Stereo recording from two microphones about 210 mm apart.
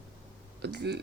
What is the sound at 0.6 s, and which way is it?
Speech, 55° right (ahead or behind).